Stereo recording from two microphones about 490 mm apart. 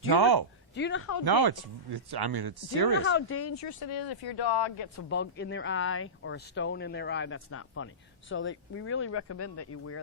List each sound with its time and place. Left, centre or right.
0.1 s speech: right
0.7 s speech: left
1.2 s speech: right
3.0 s speech: left
4.9 s speech: left